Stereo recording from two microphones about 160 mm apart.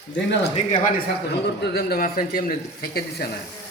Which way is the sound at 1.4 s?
85° left.